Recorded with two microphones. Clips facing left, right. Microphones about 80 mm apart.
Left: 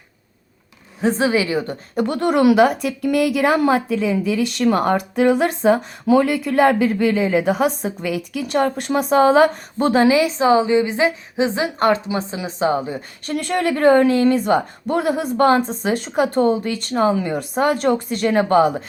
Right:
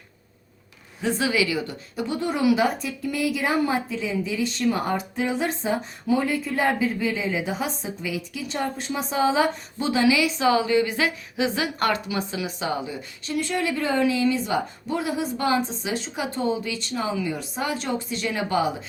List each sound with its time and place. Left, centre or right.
1.0 s a woman's voice: left
2.0 s a woman's voice: left